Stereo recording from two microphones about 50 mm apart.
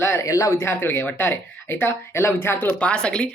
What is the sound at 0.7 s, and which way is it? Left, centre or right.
Speech, left.